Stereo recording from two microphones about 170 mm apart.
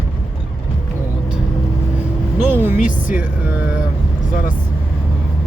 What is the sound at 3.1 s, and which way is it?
Music, 10° right (ahead or behind).